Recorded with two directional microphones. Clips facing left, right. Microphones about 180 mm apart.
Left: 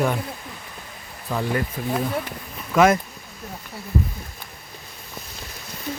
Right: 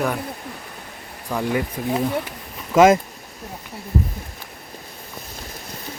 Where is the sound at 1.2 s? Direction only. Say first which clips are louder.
Right 2 dB; 10° right (ahead or behind).